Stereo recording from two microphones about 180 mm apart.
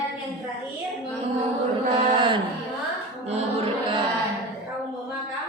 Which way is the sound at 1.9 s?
25° right (ahead or behind).